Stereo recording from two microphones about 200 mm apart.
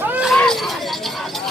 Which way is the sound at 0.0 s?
5° right (ahead or behind).